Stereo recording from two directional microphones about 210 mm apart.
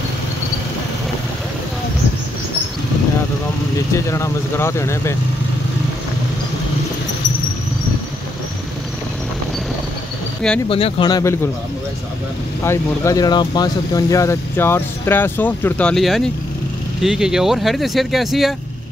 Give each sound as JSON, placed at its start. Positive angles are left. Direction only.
{"t": 3.9, "sound": "speech", "side_deg": 15}
{"t": 10.7, "sound": "speech", "side_deg": 25}
{"t": 12.6, "sound": "speech", "side_deg": 15}